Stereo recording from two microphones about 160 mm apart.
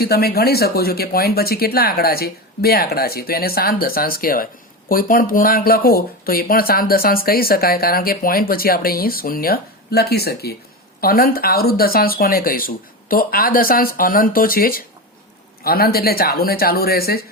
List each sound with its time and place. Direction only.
0.0 s speech: 75° left (ahead or behind)
11.0 s speech: 65° left (ahead or behind)